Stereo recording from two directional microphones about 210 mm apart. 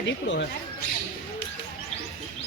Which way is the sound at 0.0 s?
60° left (ahead or behind).